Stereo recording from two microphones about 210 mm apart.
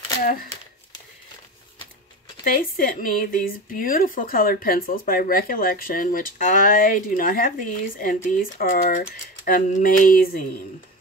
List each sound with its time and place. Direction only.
2.4 s speech: 45° left (ahead or behind)